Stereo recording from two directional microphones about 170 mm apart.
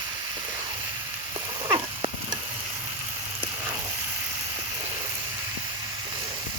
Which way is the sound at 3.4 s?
15° right (ahead or behind).